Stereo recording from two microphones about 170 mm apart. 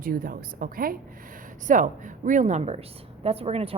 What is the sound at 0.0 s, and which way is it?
A woman's voice, 55° right (ahead or behind).